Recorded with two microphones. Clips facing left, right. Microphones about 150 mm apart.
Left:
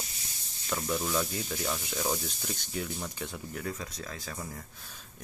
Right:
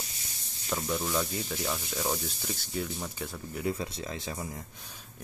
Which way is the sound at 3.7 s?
30° right (ahead or behind).